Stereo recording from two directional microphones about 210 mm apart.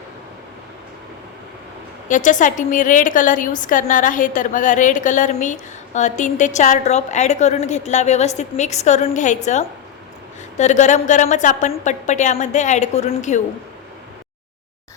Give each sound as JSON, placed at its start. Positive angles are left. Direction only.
{"t": 2.0, "sound": "a woman's voice", "side_deg": 35}